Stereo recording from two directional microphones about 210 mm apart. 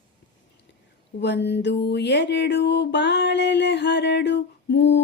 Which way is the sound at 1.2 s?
55° left (ahead or behind).